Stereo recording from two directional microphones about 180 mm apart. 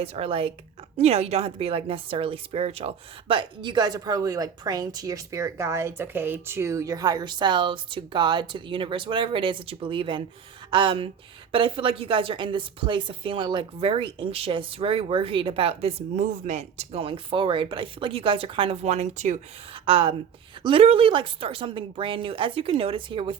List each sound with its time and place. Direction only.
0.0 s a woman's voice: 35° right (ahead or behind)
19.8 s a woman's voice: 30° right (ahead or behind)